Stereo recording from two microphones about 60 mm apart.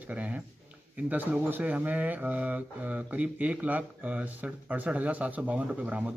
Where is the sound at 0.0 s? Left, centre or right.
Right.